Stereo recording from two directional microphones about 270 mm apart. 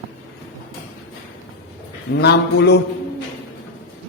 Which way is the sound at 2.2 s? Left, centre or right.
Left.